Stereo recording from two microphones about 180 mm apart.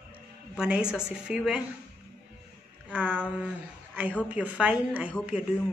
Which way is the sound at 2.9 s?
10° right (ahead or behind).